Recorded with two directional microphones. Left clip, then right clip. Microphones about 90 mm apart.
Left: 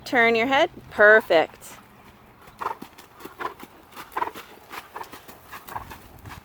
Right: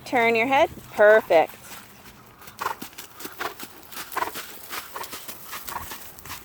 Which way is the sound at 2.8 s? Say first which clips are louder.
Right 3 dB; 35° right (ahead or behind).